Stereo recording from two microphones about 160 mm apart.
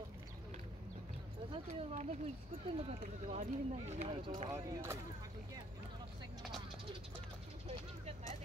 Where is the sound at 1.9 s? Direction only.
45° right (ahead or behind).